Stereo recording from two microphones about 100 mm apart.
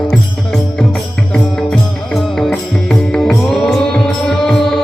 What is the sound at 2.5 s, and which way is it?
Music, 5° left (ahead or behind).